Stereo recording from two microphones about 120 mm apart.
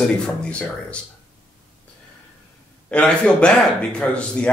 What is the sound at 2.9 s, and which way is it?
Speech, 10° left (ahead or behind).